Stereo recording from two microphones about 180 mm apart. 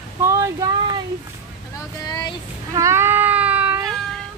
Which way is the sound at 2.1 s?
20° left (ahead or behind).